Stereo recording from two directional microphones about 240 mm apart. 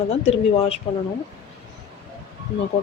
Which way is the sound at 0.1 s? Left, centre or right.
Left.